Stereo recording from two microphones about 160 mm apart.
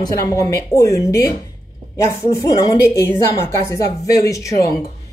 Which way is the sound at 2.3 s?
20° left (ahead or behind).